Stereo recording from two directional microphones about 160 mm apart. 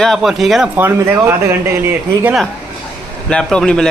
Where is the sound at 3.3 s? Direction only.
5° left (ahead or behind).